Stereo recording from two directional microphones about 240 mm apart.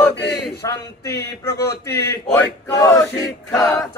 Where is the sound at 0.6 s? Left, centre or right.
Centre.